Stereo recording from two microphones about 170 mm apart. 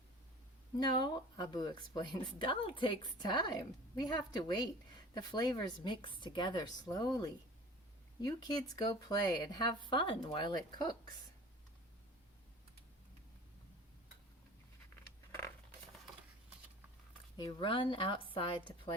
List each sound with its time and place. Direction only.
0.8 s speech: 25° left (ahead or behind)
17.3 s speech: 30° left (ahead or behind)